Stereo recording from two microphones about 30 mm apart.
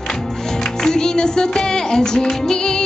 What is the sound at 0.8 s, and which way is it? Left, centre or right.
Music, left.